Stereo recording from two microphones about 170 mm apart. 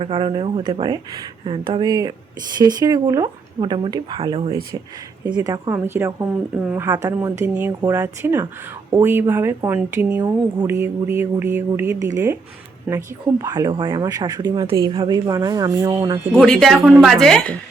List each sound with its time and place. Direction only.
0.0 s speech: 30° right (ahead or behind)
5.4 s speech: 20° right (ahead or behind)
7.8 s speech: 20° right (ahead or behind)
13.4 s speech: 25° right (ahead or behind)
16.3 s speech: 5° left (ahead or behind)